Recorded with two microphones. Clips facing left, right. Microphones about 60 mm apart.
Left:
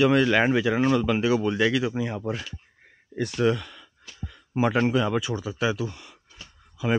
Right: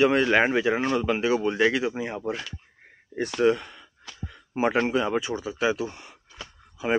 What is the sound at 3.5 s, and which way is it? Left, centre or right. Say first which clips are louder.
Speech: right 2 dB; right.